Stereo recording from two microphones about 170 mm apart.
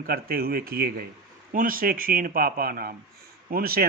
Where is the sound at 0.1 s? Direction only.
60° right (ahead or behind).